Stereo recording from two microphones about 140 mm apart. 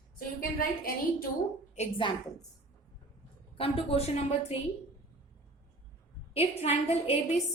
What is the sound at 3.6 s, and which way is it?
Speech, 45° left (ahead or behind).